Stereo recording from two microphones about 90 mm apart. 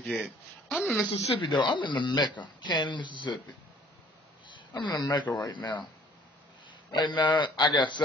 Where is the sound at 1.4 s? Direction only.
65° left (ahead or behind).